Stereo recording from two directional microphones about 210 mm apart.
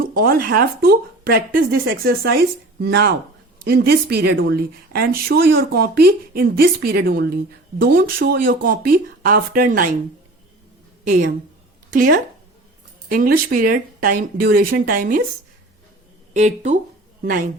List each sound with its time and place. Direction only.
0.0 s speech: 45° right (ahead or behind)
11.0 s a woman's voice: 40° right (ahead or behind)
16.3 s speech: 35° right (ahead or behind)